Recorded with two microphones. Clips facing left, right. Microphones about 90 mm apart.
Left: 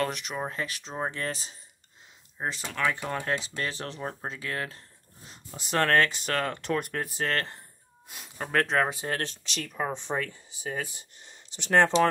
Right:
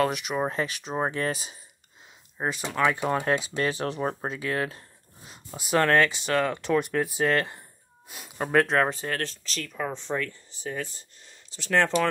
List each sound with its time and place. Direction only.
0.0 s speech: 10° right (ahead or behind)
0.4 s speech: 25° right (ahead or behind); by 8.9 s centre (ahead or behind)
9.4 s speech: 20° left (ahead or behind)
11.7 s speech: 20° left (ahead or behind)